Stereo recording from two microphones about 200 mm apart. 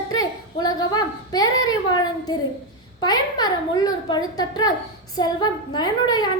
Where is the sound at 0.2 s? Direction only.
20° left (ahead or behind).